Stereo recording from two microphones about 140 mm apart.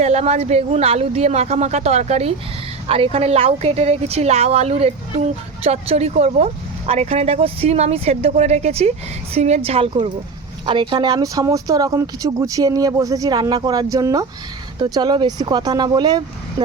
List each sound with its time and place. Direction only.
0.0 s a woman's voice: 50° right (ahead or behind)
9.6 s speech: 40° right (ahead or behind)